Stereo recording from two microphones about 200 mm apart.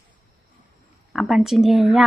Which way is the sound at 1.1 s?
Centre (ahead or behind).